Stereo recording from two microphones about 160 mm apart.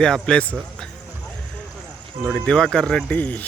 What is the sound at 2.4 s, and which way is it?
Speech, 5° left (ahead or behind).